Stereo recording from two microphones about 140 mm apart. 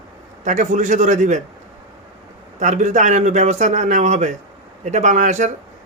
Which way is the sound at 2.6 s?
60° right (ahead or behind).